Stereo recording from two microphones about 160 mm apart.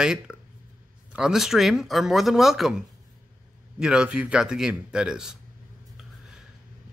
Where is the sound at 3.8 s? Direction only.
5° right (ahead or behind).